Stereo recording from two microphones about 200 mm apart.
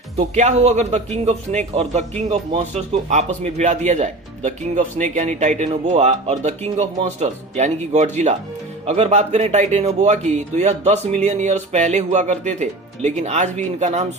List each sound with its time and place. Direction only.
0.2 s a man's voice: 35° right (ahead or behind)